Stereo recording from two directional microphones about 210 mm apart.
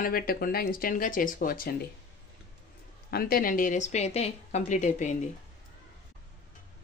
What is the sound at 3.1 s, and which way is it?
Speech, 45° left (ahead or behind).